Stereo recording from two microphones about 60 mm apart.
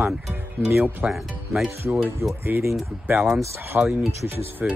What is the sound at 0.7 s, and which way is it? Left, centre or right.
Speech, right.